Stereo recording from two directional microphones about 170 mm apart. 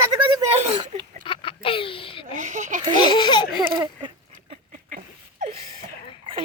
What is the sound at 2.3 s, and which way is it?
Speech, 45° right (ahead or behind).